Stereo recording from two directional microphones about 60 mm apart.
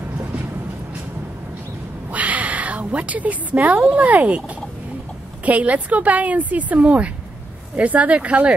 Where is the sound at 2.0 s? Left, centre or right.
Right.